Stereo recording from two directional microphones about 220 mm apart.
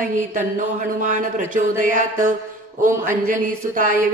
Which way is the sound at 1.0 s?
35° right (ahead or behind).